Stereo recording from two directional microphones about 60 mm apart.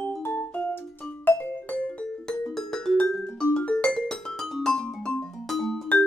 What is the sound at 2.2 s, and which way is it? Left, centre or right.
Music, centre.